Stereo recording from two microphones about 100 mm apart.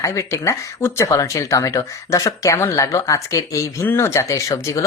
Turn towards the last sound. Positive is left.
turn(degrees=35)  # may be behind; listen again after turning